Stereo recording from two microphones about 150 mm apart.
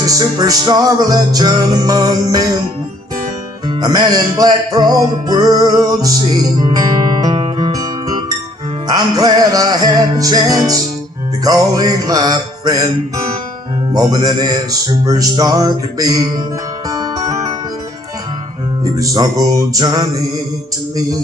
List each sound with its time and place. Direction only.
0.0 s music: 25° right (ahead or behind)
3.8 s music: 25° right (ahead or behind)
13.9 s music: 25° right (ahead or behind)
18.9 s music: 25° right (ahead or behind)